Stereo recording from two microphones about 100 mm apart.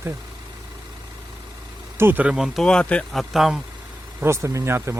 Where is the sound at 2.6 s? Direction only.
10° left (ahead or behind).